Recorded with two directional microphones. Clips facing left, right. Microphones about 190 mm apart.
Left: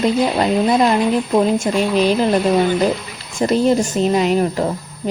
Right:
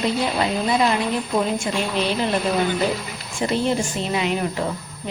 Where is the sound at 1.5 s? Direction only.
40° left (ahead or behind).